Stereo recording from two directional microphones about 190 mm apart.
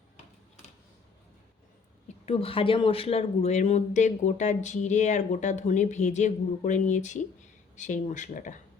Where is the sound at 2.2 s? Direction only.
30° left (ahead or behind).